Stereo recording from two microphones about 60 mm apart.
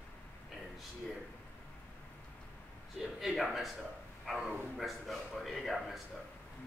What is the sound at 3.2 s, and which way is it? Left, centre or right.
Speech, centre.